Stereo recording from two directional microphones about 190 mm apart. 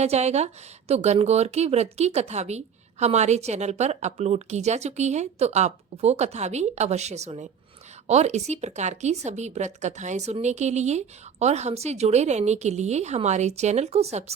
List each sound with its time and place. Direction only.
0.0 s speech: 35° right (ahead or behind)